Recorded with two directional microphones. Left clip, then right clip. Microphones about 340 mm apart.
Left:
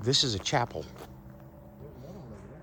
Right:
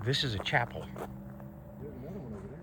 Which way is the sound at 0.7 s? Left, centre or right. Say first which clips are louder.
Left 4 dB; left.